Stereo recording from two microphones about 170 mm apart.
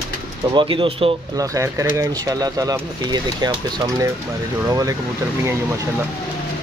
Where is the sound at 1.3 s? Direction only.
20° right (ahead or behind).